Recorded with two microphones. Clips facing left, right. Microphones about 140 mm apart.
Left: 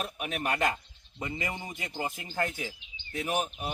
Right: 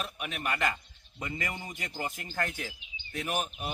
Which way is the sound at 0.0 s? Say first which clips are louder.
Left 3 dB; 40° left (ahead or behind).